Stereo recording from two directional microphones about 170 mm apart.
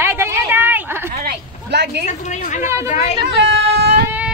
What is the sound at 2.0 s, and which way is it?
A woman's voice, 45° left (ahead or behind).